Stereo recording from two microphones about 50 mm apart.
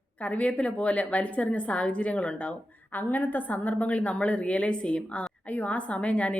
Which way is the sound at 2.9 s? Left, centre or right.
Left.